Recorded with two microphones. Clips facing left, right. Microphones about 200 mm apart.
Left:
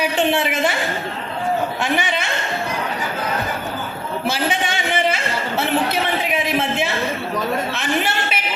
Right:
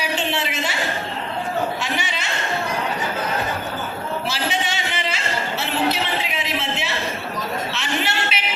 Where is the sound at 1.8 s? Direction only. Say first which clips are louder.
Left 6 dB; 55° left (ahead or behind).